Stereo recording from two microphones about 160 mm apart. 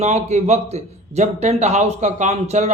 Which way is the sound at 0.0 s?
45° right (ahead or behind).